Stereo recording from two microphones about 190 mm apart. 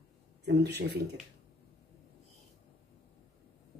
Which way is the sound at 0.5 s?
60° right (ahead or behind).